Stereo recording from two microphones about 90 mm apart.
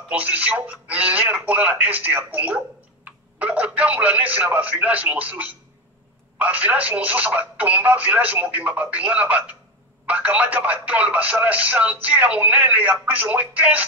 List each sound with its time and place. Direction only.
0.1 s speech: 15° right (ahead or behind)